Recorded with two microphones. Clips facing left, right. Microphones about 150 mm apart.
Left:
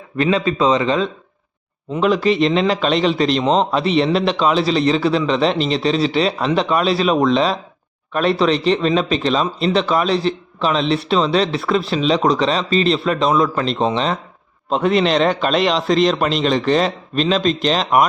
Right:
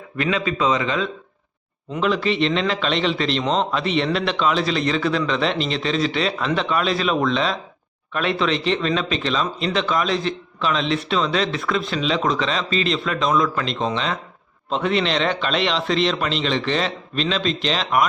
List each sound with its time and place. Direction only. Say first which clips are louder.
0.2 s speech: left 5 dB; 35° left (ahead or behind)
1.9 s a man's voice: left 5 dB; 45° left (ahead or behind)